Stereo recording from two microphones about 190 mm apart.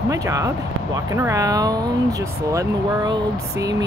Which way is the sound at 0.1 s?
15° right (ahead or behind).